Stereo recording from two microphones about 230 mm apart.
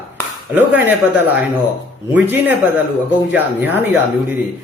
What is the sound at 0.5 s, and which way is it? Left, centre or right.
A man's voice, centre.